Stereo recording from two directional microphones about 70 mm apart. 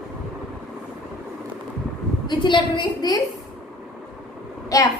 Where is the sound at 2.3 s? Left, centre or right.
Left.